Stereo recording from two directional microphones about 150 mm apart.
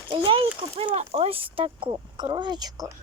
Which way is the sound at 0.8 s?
40° right (ahead or behind).